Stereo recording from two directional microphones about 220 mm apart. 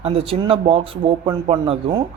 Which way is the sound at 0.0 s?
25° right (ahead or behind).